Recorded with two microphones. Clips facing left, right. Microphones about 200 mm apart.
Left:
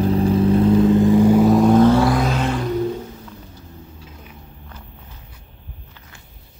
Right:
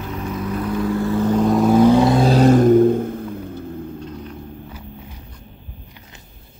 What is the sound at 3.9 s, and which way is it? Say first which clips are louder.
Rumble: right 11 dB; 5° left (ahead or behind).